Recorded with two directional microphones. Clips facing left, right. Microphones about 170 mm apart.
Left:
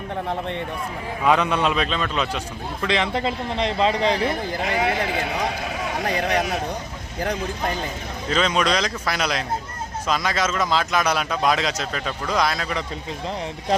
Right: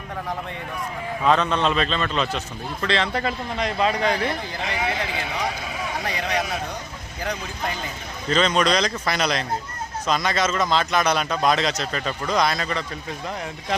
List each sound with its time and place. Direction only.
1.2 s a man's voice: 10° left (ahead or behind)
2.8 s a man's voice: 15° left (ahead or behind)
4.7 s speech: 50° left (ahead or behind)
8.3 s a man's voice: 5° left (ahead or behind)
13.2 s a man's voice: 25° left (ahead or behind)